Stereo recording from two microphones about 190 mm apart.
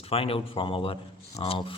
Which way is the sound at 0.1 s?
30° left (ahead or behind).